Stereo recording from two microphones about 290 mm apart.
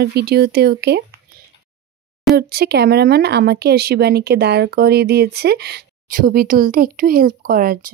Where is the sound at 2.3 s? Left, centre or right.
Right.